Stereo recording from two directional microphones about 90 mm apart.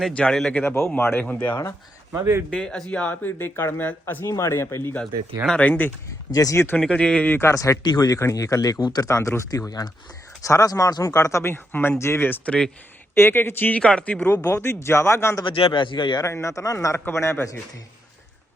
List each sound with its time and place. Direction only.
0.2 s a man's voice: 5° left (ahead or behind)
0.5 s speech: 25° left (ahead or behind)
2.1 s a man's voice: 30° right (ahead or behind)
2.5 s speech: 5° left (ahead or behind); by 4.9 s 30° left (ahead or behind)
5.5 s speech: 15° left (ahead or behind)
6.3 s speech: 40° left (ahead or behind)
6.7 s speech: 15° left (ahead or behind)
7.3 s speech: 25° left (ahead or behind)
7.5 s speech: 40° left (ahead or behind)
7.9 s speech: 50° left (ahead or behind)
8.2 s speech: 35° left (ahead or behind)
9.0 s speech: 30° left (ahead or behind)
15.4 s speech: 80° left; by 16.2 s 65° left (ahead or behind)
16.2 s speech: 35° left (ahead or behind)